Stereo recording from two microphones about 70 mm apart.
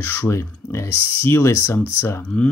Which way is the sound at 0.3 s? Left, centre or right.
Left.